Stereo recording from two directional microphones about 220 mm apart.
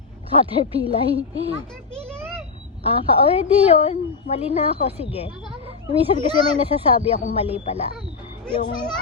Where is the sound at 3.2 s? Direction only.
25° left (ahead or behind).